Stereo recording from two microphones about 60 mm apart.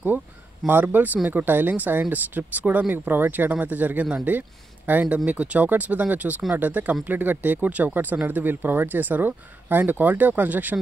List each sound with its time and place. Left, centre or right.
0.7 s speech: right